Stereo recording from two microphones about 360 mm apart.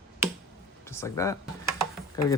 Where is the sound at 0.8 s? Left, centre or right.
Centre.